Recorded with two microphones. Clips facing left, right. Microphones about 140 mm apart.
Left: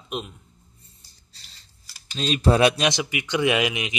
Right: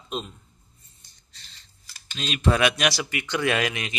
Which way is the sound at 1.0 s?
30° left (ahead or behind).